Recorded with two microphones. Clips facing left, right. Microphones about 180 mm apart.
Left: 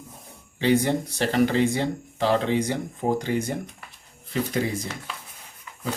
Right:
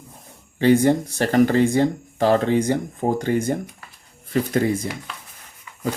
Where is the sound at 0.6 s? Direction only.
50° right (ahead or behind).